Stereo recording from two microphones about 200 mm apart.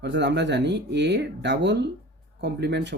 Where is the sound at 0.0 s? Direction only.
60° right (ahead or behind).